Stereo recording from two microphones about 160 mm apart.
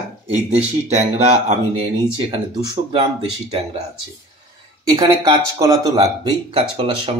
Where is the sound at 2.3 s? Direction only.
25° right (ahead or behind).